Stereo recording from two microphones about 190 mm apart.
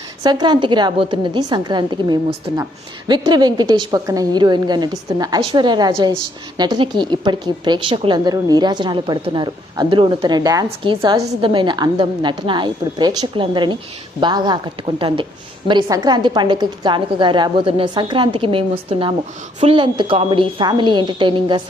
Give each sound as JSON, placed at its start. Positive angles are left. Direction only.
{"t": 0.2, "sound": "a woman's voice", "side_deg": -20}